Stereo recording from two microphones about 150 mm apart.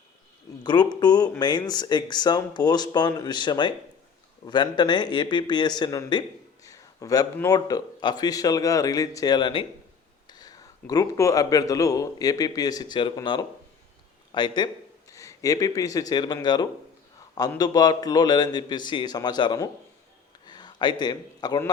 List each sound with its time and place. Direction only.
0.6 s speech: 30° left (ahead or behind)
6.7 s a sound: 25° left (ahead or behind)
7.4 s a man's voice: 25° left (ahead or behind)
15.1 s a man's voice: 20° left (ahead or behind)